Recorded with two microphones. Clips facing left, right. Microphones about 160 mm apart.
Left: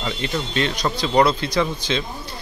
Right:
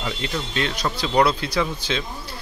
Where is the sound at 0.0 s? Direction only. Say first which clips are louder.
Left 2 dB; centre (ahead or behind).